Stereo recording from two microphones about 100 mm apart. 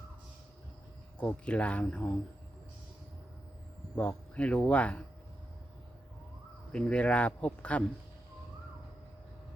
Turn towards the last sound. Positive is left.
turn(degrees=10)  # may be behind; listen again after turning